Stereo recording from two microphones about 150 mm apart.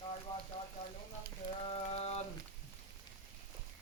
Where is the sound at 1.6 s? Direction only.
40° left (ahead or behind).